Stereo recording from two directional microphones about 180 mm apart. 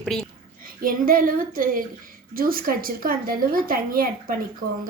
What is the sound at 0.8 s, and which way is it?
A woman's voice, 55° right (ahead or behind).